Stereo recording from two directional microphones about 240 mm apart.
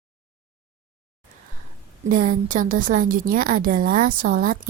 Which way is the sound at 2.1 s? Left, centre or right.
Right.